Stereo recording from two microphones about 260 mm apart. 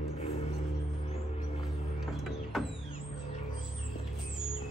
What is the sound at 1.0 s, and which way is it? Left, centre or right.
Music, left.